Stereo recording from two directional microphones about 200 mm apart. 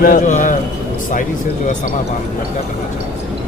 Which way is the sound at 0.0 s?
40° left (ahead or behind).